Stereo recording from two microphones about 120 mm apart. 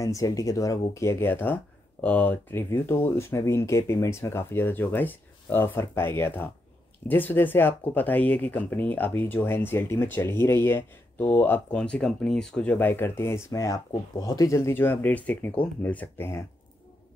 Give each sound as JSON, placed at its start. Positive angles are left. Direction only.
{"t": 0.0, "sound": "speech", "side_deg": 25}